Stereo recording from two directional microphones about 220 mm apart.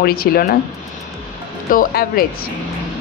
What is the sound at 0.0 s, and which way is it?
Speech, 45° left (ahead or behind).